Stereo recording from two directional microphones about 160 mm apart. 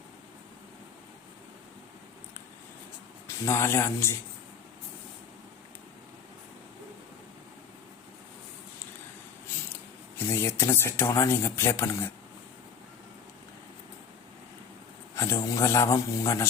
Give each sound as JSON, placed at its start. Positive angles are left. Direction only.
{"t": 3.2, "sound": "speech", "side_deg": 15}
{"t": 10.2, "sound": "speech", "side_deg": 15}
{"t": 15.1, "sound": "a man's voice", "side_deg": 20}